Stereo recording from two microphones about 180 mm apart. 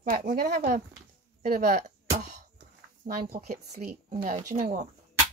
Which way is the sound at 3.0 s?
55° right (ahead or behind).